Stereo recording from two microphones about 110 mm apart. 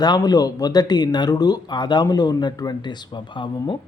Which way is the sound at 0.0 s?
35° left (ahead or behind).